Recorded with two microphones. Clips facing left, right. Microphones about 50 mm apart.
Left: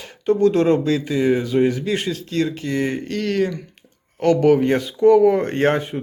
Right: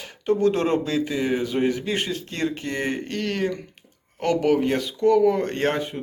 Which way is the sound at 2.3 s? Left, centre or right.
Right.